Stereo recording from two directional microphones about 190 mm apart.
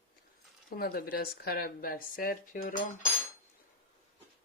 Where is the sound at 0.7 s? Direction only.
50° left (ahead or behind).